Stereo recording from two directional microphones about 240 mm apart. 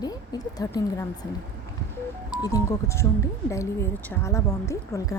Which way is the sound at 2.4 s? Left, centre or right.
Centre.